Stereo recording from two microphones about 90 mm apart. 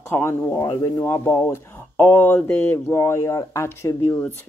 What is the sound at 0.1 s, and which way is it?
Speech, 25° left (ahead or behind).